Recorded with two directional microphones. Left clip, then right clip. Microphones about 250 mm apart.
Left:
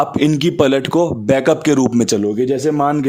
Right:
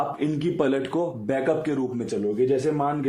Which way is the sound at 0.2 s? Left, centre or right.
Left.